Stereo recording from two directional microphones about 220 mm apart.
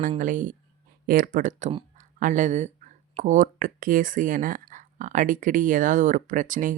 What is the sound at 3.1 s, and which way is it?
Speech, 35° right (ahead or behind).